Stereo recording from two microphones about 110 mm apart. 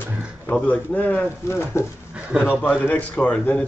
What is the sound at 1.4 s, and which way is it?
Speech, 25° left (ahead or behind).